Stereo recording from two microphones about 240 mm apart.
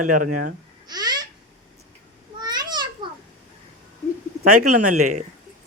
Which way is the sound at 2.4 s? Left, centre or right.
Centre.